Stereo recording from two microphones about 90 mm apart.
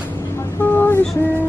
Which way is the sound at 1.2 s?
25° left (ahead or behind).